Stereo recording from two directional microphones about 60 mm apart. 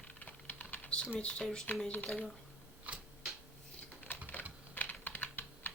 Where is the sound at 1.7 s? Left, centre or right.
Left.